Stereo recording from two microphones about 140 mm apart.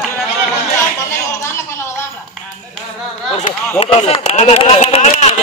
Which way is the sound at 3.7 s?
45° left (ahead or behind).